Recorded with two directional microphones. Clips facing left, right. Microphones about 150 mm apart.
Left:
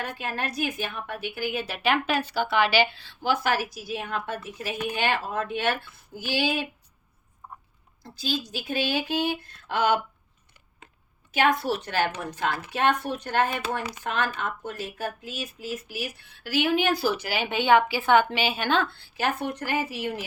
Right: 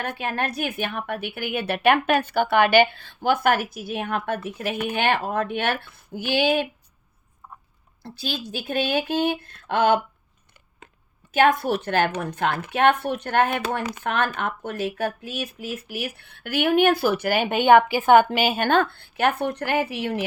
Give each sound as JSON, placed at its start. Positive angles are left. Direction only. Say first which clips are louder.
{"t": 0.0, "sound": "a woman's voice", "louder": "right 4 dB", "side_deg": -60}
{"t": 8.0, "sound": "a woman's voice", "louder": "even", "side_deg": -60}
{"t": 11.3, "sound": "a woman's voice", "louder": "right 4 dB", "side_deg": -50}